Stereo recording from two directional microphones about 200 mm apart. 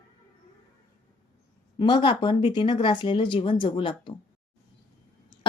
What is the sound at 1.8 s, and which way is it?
Speech, 25° left (ahead or behind).